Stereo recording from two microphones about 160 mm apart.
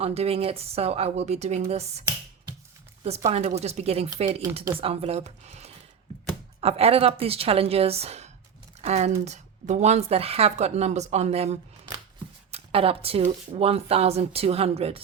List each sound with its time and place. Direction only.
0.0 s speech: 40° right (ahead or behind)
3.2 s speech: 40° right (ahead or behind)
4.5 s speech: 15° right (ahead or behind)
4.8 s speech: 40° right (ahead or behind)